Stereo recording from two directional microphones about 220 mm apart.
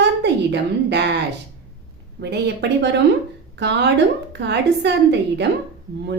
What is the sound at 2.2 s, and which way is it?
A woman's voice, 50° right (ahead or behind).